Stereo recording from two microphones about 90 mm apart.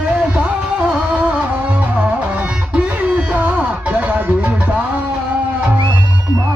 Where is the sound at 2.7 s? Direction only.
15° right (ahead or behind).